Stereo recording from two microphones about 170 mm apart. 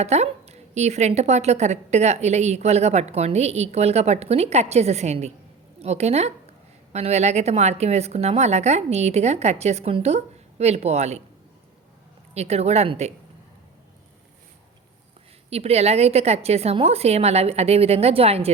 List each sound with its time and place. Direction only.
0.0 s a woman's voice: 40° right (ahead or behind)
12.3 s a woman's voice: 40° right (ahead or behind)
15.4 s a woman's voice: 35° right (ahead or behind)